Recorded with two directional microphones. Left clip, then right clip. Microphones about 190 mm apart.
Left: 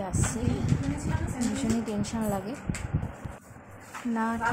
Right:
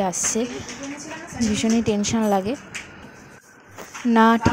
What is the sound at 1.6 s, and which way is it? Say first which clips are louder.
Speech: right 13 dB; 35° right (ahead or behind).